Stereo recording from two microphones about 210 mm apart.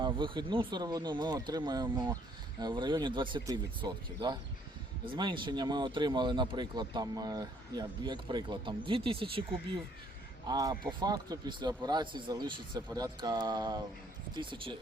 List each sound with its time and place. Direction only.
0.0 s speech: 20° right (ahead or behind)